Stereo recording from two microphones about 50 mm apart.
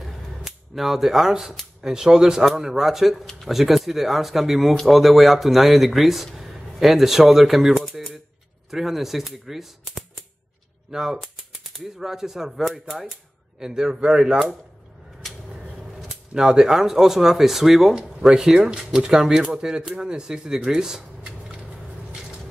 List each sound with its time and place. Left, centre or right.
0.0 s cap gun: centre
1.8 s speech: centre
13.6 s speech: centre
15.8 s a sound: centre
16.3 s speech: centre